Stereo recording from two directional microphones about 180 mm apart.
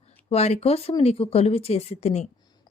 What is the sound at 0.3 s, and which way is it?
Speech, 35° left (ahead or behind).